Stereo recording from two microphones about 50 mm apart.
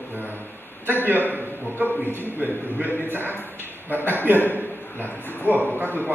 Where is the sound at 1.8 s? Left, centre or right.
Left.